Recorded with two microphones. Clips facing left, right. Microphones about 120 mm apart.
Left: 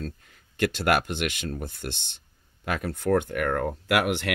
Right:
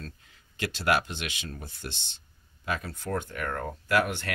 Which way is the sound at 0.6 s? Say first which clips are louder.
Left 4 dB; 55° left (ahead or behind).